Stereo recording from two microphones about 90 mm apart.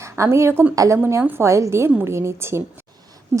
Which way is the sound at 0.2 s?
30° right (ahead or behind).